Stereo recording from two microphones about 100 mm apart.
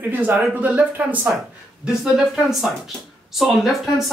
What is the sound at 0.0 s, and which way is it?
Speech, 15° right (ahead or behind).